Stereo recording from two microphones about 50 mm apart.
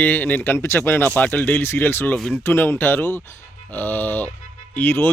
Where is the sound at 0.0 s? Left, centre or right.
Left.